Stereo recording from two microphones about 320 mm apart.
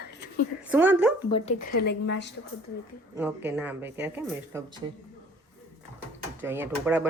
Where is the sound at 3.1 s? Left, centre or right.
Centre.